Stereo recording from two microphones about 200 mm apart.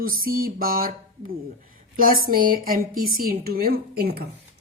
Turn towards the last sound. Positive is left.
turn(degrees=-50)  # may be behind; listen again after turning